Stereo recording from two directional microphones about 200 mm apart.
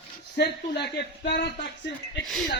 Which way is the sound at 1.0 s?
55° left (ahead or behind).